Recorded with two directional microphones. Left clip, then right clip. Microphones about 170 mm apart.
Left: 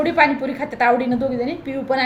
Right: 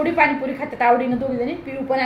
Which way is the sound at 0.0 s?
20° left (ahead or behind).